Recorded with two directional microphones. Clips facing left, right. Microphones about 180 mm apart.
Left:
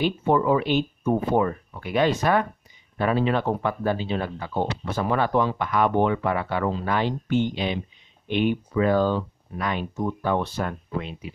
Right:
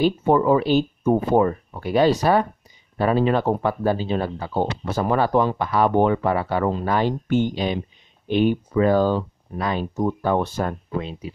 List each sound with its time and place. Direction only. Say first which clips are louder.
0.0 s speech: right 4 dB; 40° right (ahead or behind)